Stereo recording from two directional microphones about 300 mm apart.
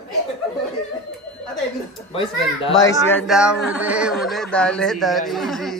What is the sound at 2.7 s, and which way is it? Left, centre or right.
A man's voice, centre.